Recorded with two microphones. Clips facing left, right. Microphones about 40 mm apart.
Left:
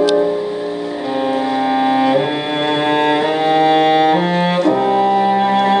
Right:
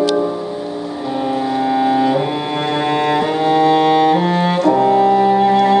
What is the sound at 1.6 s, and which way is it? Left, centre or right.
Cello, left.